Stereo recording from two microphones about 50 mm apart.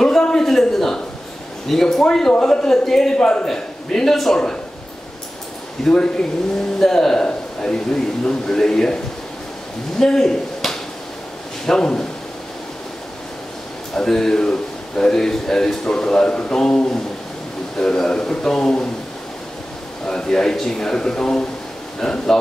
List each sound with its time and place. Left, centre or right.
0.0 s a sound: centre
1.7 s a man's voice: centre
5.9 s a man's voice: centre
13.9 s a man's voice: centre
20.1 s a man's voice: centre